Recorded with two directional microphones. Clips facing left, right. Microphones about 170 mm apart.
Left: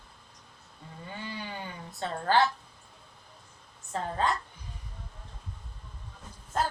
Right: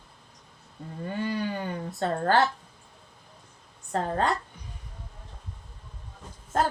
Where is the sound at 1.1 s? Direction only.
55° right (ahead or behind).